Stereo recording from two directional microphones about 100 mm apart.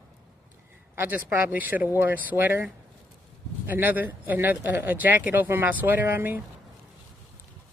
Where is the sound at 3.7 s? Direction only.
20° right (ahead or behind).